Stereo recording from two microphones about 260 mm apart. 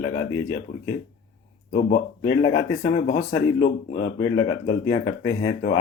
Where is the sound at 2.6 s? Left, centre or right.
Left.